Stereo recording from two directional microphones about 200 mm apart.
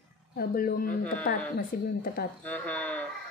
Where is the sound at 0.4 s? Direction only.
50° left (ahead or behind).